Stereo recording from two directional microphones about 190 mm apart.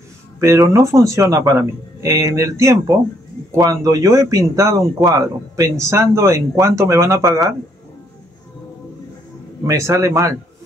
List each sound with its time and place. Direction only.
0.4 s a man's voice: 15° right (ahead or behind)
9.7 s a man's voice: 15° right (ahead or behind)